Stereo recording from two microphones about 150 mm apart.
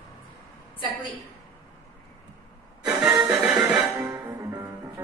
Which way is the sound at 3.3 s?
5° right (ahead or behind).